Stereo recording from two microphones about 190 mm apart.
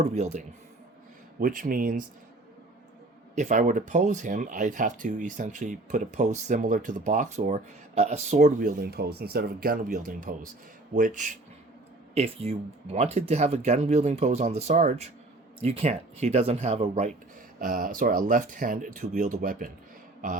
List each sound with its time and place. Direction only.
0.1 s speech: 35° right (ahead or behind)
3.3 s speech: 40° right (ahead or behind)
17.6 s speech: 50° right (ahead or behind)